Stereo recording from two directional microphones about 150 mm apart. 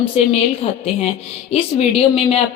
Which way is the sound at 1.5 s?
40° left (ahead or behind).